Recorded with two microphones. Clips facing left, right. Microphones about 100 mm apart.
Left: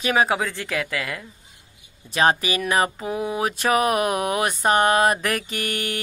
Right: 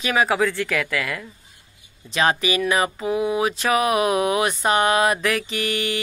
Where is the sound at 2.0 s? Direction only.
40° left (ahead or behind).